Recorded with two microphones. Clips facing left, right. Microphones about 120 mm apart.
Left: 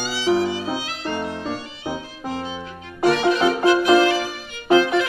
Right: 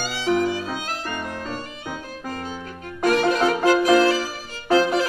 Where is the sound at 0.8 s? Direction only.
45° right (ahead or behind).